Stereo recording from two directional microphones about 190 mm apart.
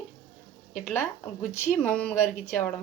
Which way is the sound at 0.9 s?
10° left (ahead or behind).